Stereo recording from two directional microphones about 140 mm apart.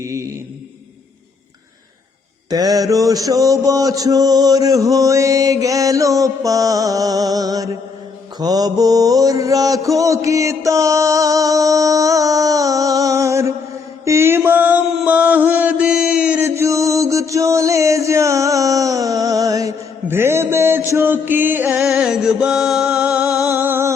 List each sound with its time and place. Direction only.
0.0 s mantra: 20° right (ahead or behind)
2.5 s mantra: 25° right (ahead or behind)
14.0 s music: 20° right (ahead or behind)
16.6 s music: 20° right (ahead or behind)
21.8 s music: 5° right (ahead or behind)
23.5 s a sound: 15° right (ahead or behind)